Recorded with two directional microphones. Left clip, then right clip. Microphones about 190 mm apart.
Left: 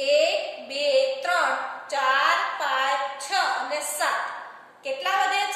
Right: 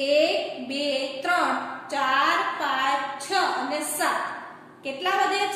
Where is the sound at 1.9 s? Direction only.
20° left (ahead or behind).